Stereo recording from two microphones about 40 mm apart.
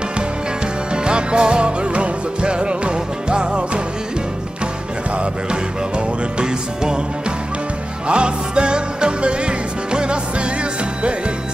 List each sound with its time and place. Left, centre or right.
0.9 s music: right
5.5 s music: right
8.1 s music: right